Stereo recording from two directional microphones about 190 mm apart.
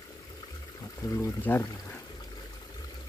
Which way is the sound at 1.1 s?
15° left (ahead or behind).